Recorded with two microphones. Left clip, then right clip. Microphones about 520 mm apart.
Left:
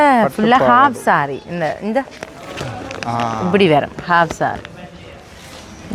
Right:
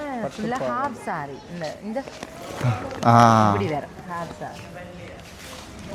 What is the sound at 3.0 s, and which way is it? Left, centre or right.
Speech, right.